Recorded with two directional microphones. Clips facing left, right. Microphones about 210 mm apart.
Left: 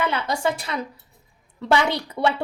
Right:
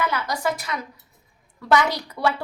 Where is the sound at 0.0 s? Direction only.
25° left (ahead or behind).